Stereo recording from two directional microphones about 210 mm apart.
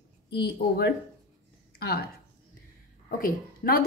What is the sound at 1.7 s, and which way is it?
A woman's voice, 50° left (ahead or behind).